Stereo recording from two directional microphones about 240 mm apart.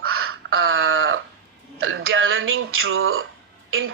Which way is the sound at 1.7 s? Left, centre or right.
Right.